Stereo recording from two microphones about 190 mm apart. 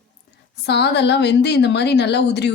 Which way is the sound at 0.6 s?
60° left (ahead or behind).